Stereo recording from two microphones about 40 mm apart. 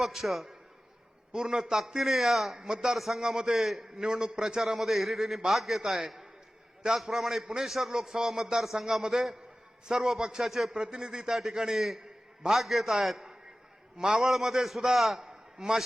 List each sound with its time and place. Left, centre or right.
0.0 s a man's voice: centre
1.3 s a man's voice: centre
1.9 s a man's voice: centre
10.9 s a man's voice: centre
15.2 s a sound: centre